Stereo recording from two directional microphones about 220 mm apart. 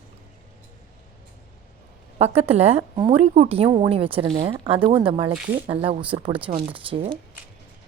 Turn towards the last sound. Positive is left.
turn(degrees=-25)  # may be behind; listen again after turning